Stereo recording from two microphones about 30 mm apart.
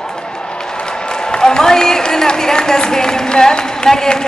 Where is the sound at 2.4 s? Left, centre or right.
Left.